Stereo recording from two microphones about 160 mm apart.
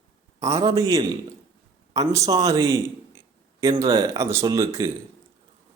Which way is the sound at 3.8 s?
20° right (ahead or behind).